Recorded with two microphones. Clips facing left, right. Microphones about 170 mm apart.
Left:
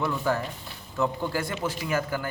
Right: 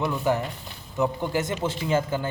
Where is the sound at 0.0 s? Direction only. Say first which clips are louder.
Right 2 dB; 20° right (ahead or behind).